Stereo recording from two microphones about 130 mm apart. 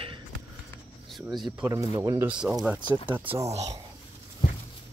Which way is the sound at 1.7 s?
25° right (ahead or behind).